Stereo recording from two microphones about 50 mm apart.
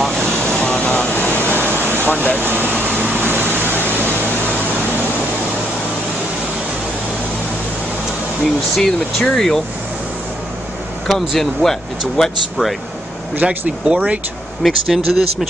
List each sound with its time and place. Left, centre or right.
0.0 s vehicle: centre
0.6 s vehicle: left
1.1 s a sound: left
1.7 s air conditioning: right
2.3 s vehicle: right
8.7 s speech: centre
11.1 s speech: centre
13.4 s speech: right
14.6 s speech: centre